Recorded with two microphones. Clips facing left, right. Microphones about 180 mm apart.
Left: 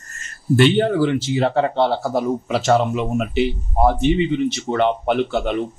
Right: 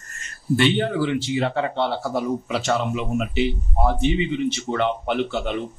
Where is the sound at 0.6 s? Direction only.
45° left (ahead or behind).